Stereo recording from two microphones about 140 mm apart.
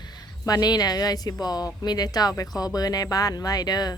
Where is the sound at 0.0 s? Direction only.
30° left (ahead or behind).